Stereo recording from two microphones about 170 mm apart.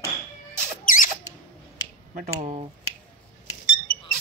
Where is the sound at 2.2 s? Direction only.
45° right (ahead or behind).